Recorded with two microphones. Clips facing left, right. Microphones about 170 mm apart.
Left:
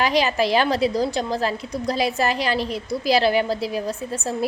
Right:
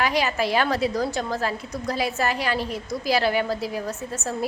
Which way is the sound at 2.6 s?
90° left.